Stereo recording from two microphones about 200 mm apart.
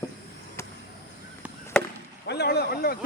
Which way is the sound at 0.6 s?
15° left (ahead or behind).